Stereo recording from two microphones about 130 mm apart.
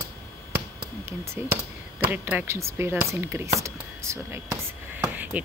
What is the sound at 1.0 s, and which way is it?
Speech, 20° right (ahead or behind).